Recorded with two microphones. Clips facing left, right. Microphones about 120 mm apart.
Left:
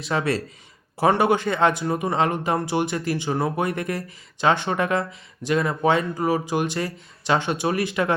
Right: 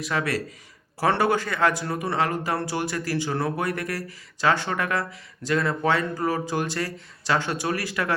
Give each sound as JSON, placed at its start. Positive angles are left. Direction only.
{"t": 0.0, "sound": "a man's voice", "side_deg": 25}